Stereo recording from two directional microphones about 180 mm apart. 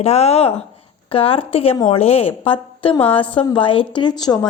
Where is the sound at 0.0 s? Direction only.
35° left (ahead or behind).